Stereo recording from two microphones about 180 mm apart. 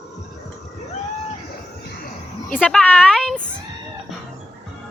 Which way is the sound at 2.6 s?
5° left (ahead or behind).